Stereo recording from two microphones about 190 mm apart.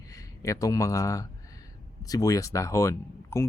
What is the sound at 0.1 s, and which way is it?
Speech, 15° left (ahead or behind).